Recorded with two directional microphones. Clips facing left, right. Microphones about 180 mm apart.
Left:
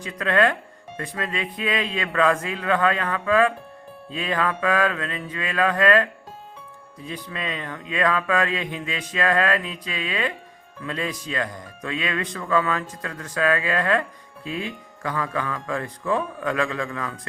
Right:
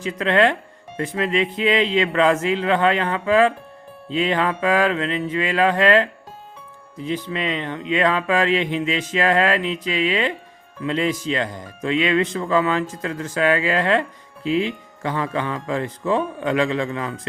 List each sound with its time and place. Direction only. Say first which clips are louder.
0.0 s speech: right 3 dB; 25° right (ahead or behind)
7.3 s speech: right 6 dB; 25° right (ahead or behind)